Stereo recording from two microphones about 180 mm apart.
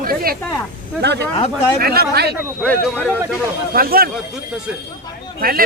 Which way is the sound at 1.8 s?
60° right (ahead or behind).